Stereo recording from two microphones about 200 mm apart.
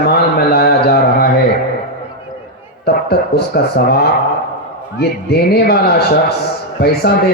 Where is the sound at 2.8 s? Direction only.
50° left (ahead or behind).